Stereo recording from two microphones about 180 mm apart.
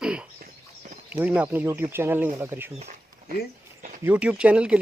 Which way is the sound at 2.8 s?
45° right (ahead or behind).